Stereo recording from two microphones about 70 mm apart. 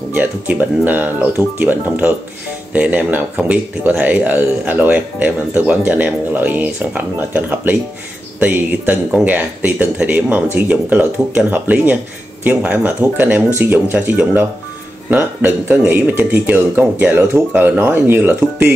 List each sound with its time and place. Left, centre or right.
0.1 s speech: right